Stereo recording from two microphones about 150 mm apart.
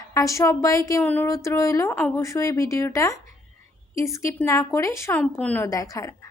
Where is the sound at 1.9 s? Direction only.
10° left (ahead or behind).